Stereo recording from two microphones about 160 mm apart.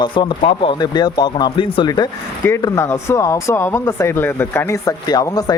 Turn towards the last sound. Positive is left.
turn(degrees=25)  # may be behind; listen again after turning